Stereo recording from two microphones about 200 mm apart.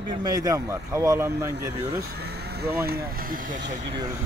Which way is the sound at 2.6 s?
50° right (ahead or behind).